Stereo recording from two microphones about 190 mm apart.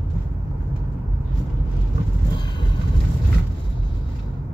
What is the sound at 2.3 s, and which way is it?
Vehicle, 25° left (ahead or behind).